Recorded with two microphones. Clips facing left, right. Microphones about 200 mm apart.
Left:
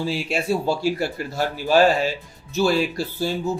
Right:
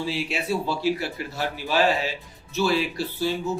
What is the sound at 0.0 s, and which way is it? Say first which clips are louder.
Speech: left 3 dB; 45° left (ahead or behind).